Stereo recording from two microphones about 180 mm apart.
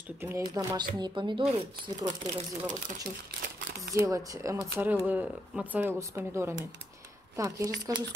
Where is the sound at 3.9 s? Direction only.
20° right (ahead or behind).